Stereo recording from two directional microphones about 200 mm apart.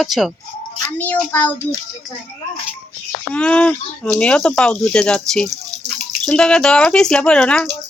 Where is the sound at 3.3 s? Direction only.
5° left (ahead or behind).